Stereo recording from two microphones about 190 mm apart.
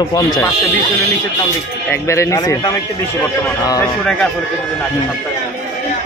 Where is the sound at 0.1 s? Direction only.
20° left (ahead or behind).